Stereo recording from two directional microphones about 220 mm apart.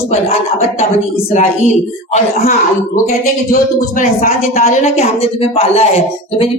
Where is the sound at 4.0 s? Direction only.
35° left (ahead or behind).